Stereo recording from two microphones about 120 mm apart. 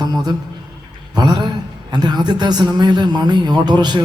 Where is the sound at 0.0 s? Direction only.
35° right (ahead or behind).